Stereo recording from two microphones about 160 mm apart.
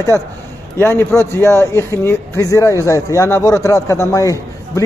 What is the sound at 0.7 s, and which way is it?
A man's voice, 15° left (ahead or behind).